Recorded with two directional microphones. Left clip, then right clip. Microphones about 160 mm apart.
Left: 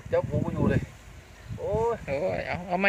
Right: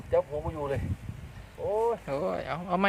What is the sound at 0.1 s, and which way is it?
Speech, centre (ahead or behind).